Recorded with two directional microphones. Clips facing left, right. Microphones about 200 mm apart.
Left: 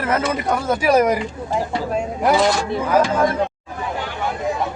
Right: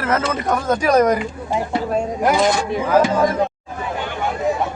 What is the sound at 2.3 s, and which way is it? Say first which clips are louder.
Speech: left 1 dB; 10° right (ahead or behind).